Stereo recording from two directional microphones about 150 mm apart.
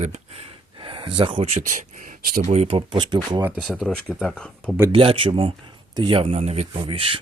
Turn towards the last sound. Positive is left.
turn(degrees=-35)  # may be behind; listen again after turning